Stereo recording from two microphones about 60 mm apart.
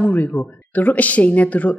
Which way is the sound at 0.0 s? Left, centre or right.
Left.